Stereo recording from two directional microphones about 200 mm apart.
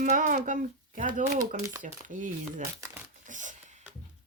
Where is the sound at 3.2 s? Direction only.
40° right (ahead or behind).